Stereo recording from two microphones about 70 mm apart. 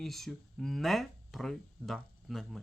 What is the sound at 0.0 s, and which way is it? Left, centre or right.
Speech, centre.